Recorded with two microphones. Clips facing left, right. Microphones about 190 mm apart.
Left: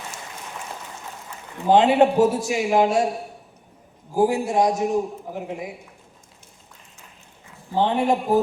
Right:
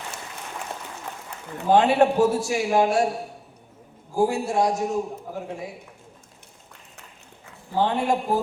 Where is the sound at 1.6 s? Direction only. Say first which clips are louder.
Left 2 dB; 20° left (ahead or behind).